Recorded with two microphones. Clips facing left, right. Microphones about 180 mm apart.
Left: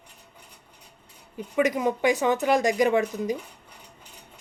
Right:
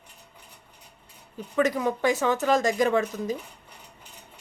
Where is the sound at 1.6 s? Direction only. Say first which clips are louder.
Left 1 dB; 15° left (ahead or behind).